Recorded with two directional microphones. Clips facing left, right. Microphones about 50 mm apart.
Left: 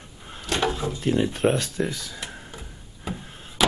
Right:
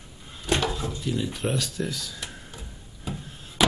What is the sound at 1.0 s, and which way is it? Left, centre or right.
Speech, left.